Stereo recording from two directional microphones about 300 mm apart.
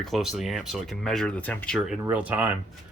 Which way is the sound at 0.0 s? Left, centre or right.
Centre.